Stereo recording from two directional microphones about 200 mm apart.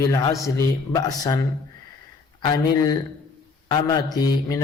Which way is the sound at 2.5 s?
20° left (ahead or behind).